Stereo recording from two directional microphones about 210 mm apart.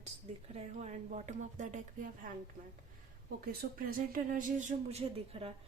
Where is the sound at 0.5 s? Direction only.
35° right (ahead or behind).